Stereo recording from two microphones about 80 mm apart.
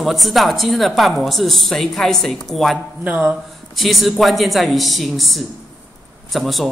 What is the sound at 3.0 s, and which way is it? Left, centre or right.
Speech, centre.